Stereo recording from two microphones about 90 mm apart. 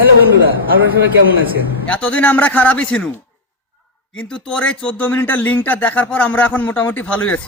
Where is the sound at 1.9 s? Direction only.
15° left (ahead or behind).